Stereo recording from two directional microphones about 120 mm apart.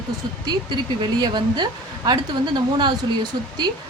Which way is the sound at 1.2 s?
40° right (ahead or behind).